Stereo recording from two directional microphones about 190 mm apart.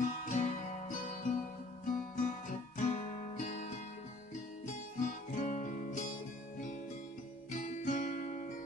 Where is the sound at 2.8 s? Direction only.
40° left (ahead or behind).